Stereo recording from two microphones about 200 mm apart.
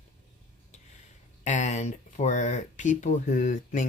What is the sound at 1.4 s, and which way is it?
Speech, 35° left (ahead or behind).